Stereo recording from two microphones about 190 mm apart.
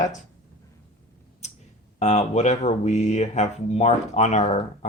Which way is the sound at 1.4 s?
35° left (ahead or behind).